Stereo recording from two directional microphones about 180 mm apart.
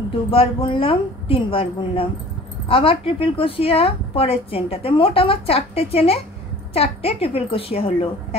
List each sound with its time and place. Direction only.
0.3 s a woman's voice: 30° left (ahead or behind)